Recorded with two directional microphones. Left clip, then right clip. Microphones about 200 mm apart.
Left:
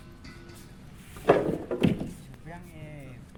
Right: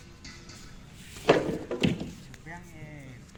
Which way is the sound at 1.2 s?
50° left (ahead or behind).